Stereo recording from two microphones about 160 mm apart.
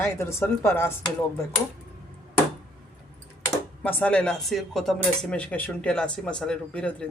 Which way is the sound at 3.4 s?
10° left (ahead or behind).